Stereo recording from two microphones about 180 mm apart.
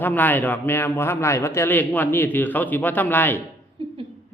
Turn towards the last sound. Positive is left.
turn(degrees=-30)  # may be behind; listen again after turning